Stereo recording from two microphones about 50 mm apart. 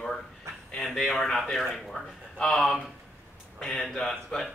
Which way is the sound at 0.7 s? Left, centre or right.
Centre.